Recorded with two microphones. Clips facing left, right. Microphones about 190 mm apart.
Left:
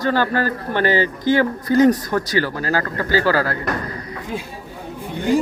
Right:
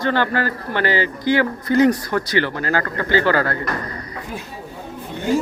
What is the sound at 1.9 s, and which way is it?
Speech, 10° left (ahead or behind).